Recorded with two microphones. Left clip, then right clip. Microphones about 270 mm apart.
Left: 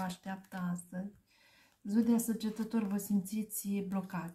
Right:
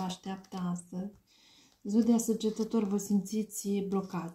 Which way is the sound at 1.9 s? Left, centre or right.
Left.